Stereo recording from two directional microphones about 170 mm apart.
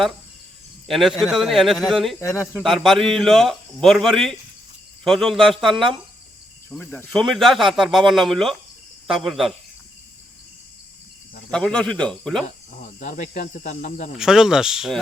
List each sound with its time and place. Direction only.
0.9 s speech: centre (ahead or behind)
2.1 s speech: 15° left (ahead or behind)
2.6 s speech: centre (ahead or behind)
6.7 s speech: 10° left (ahead or behind)
11.5 s speech: 5° left (ahead or behind)
12.5 s speech: 50° left (ahead or behind)
14.2 s speech: 5° right (ahead or behind)